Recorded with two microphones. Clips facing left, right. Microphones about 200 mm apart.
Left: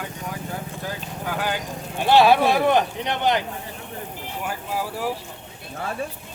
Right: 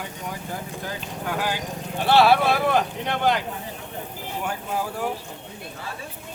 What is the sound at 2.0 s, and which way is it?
Speech, 15° left (ahead or behind).